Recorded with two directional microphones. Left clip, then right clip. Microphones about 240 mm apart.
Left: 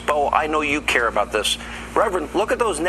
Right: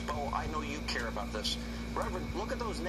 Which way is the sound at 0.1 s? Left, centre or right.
Left.